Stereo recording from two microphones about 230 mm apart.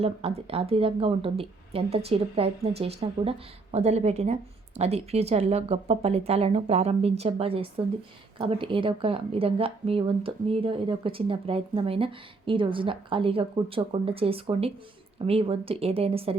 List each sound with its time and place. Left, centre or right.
0.0 s a woman's voice: right